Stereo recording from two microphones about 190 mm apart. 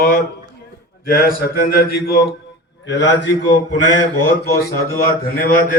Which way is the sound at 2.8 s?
70° left (ahead or behind).